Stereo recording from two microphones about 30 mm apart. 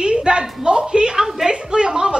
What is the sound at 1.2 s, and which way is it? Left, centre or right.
Speech, centre.